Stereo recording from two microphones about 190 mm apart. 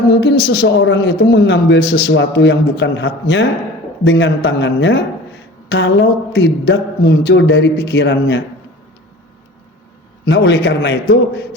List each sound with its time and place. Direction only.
0.1 s a man's voice: 65° left (ahead or behind)
10.2 s a man's voice: 70° left (ahead or behind)